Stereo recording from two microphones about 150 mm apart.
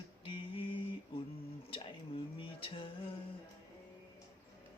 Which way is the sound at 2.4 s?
35° left (ahead or behind).